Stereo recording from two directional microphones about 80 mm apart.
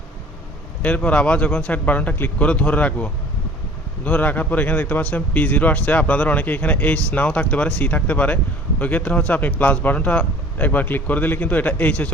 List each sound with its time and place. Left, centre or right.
0.8 s speech: centre